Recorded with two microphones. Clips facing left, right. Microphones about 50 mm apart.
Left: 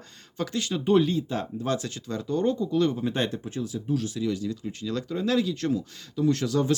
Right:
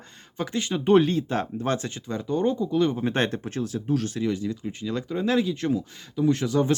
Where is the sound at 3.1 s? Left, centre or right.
Right.